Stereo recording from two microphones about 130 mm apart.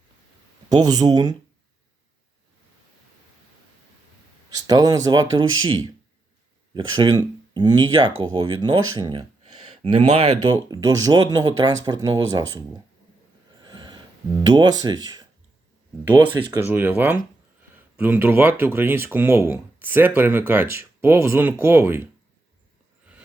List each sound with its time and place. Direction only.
0.9 s speech: 30° right (ahead or behind)
4.6 s speech: 30° right (ahead or behind)
13.6 s a sound: 35° right (ahead or behind)
14.3 s speech: 30° right (ahead or behind)
16.6 s speech: 15° right (ahead or behind)